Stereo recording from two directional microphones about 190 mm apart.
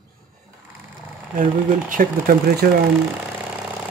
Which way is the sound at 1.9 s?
50° right (ahead or behind).